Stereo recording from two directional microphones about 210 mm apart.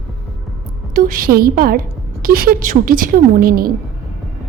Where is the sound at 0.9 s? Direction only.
40° right (ahead or behind).